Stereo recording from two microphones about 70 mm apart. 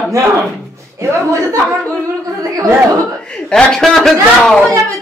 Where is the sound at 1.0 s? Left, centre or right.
Right.